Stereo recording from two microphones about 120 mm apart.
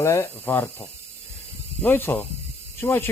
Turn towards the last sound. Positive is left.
turn(degrees=20)  # may be behind; listen again after turning